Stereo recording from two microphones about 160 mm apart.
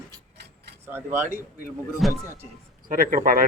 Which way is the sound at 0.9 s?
15° right (ahead or behind).